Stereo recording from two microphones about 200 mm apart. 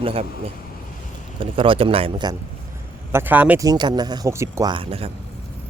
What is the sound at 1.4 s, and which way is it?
Speech, 25° right (ahead or behind).